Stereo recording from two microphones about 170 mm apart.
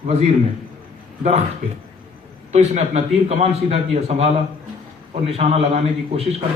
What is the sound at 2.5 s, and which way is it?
A man's voice, 40° right (ahead or behind).